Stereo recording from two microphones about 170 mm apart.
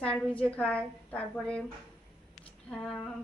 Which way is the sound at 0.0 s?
5° left (ahead or behind).